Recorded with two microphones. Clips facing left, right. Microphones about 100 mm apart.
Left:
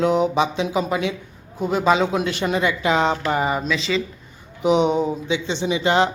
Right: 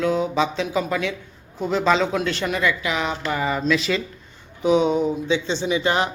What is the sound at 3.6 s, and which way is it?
Speech, centre (ahead or behind).